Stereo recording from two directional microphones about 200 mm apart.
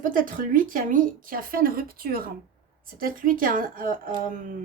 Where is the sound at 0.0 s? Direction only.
45° right (ahead or behind).